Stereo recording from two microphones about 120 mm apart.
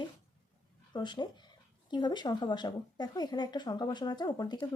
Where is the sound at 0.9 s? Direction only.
35° left (ahead or behind).